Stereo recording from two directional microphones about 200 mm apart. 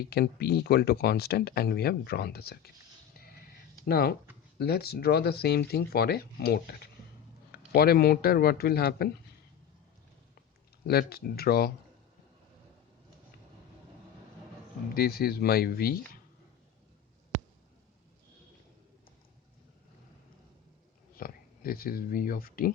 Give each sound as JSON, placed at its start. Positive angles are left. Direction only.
{"t": 0.0, "sound": "speech", "side_deg": 50}
{"t": 3.8, "sound": "speech", "side_deg": 50}
{"t": 7.7, "sound": "speech", "side_deg": 50}
{"t": 10.8, "sound": "speech", "side_deg": 50}
{"t": 14.9, "sound": "speech", "side_deg": 50}
{"t": 21.2, "sound": "speech", "side_deg": 45}